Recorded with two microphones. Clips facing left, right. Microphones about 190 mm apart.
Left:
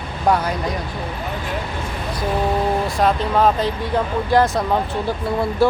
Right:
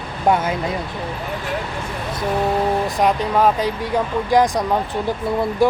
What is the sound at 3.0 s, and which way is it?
Speech, 10° right (ahead or behind).